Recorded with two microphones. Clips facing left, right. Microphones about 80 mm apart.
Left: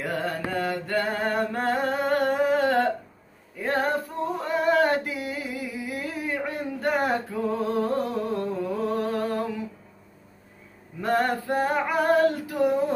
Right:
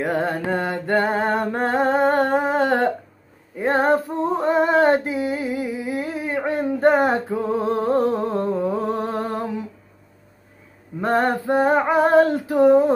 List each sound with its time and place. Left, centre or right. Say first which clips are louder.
0.0 s music: right 6 dB; right
3.5 s female singing: right 7 dB; right
11.0 s female singing: right 4 dB; right